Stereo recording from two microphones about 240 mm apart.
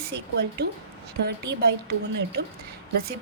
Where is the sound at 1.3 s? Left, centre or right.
Right.